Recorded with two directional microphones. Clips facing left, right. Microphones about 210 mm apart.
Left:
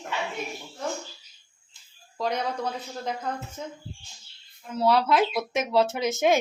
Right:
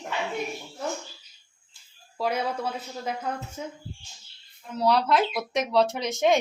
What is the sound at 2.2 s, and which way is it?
Speech, 5° right (ahead or behind).